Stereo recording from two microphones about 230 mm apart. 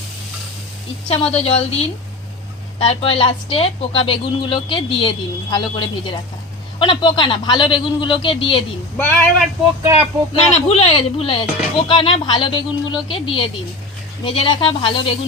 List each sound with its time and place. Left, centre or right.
1.0 s a woman's voice: left
9.0 s speech: centre
10.5 s a woman's voice: left